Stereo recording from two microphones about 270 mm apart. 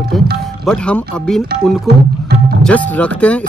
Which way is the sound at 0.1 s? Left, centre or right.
Centre.